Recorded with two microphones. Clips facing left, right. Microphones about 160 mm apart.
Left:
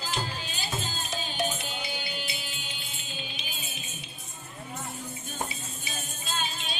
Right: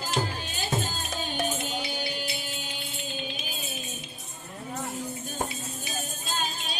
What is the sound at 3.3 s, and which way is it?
Music, 40° right (ahead or behind).